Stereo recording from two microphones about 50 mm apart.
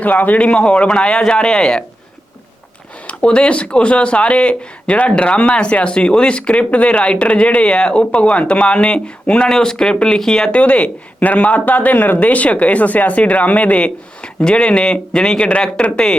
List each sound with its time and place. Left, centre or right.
0.0 s speech: left; by 1.8 s centre
3.2 s speech: centre
10.5 s speech: left